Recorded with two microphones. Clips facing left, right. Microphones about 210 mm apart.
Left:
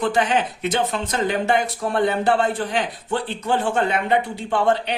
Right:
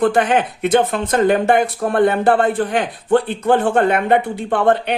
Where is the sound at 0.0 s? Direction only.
55° right (ahead or behind).